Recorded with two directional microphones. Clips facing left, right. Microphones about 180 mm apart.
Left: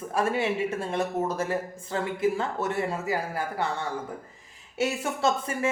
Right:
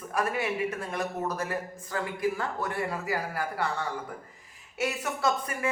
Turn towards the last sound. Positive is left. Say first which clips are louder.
# left 3 dB
turn(degrees=25)  # may be behind; listen again after turning